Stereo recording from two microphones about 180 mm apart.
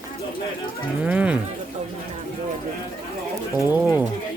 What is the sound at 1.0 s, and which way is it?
Speech, 5° right (ahead or behind).